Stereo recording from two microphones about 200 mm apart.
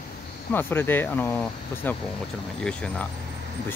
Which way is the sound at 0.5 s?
10° left (ahead or behind).